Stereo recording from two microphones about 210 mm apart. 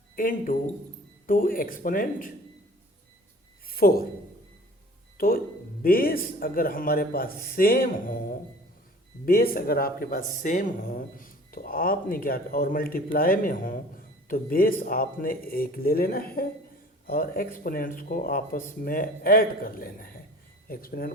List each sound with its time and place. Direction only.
0.2 s speech: 40° left (ahead or behind)
3.7 s a sound: 45° left (ahead or behind)
5.1 s speech: 45° left (ahead or behind)
9.2 s speech: 45° left (ahead or behind)